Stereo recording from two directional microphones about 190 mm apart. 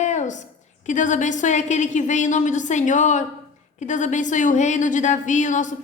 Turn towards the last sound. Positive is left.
turn(degrees=40)  # may be behind; listen again after turning